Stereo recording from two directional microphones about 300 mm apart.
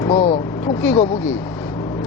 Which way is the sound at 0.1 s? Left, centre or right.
Left.